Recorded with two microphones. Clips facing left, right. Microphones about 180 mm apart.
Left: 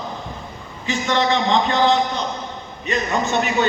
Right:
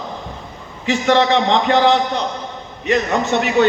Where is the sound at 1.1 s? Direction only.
75° right (ahead or behind).